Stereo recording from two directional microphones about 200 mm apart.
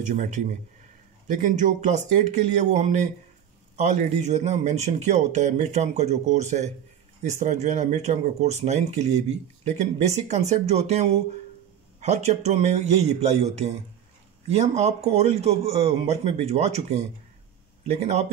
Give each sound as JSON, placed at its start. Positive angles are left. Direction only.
{"t": 0.0, "sound": "speech", "side_deg": -40}